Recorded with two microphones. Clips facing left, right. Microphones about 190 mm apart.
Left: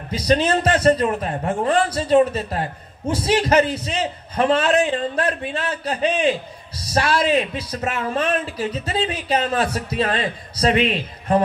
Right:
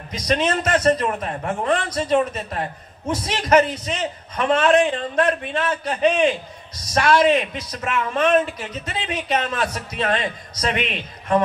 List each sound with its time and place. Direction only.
0.1 s a man's voice: 30° left (ahead or behind)